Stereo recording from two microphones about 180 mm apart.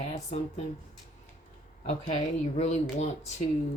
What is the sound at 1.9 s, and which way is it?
Speech, 35° left (ahead or behind).